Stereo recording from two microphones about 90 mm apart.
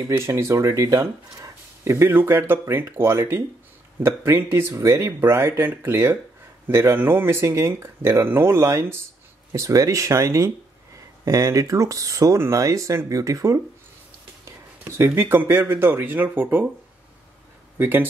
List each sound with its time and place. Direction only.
0.3 s speech: 35° right (ahead or behind)
17.7 s speech: 20° right (ahead or behind)